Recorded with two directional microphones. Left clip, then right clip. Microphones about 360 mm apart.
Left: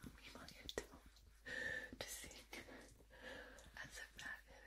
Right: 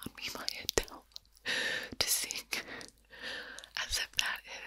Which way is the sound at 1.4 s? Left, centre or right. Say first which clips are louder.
Right 13 dB; right.